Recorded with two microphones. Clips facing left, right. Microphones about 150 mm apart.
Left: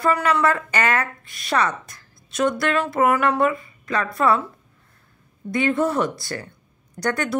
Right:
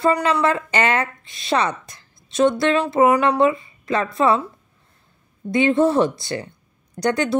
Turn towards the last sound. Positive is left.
turn(degrees=-20)  # may be behind; listen again after turning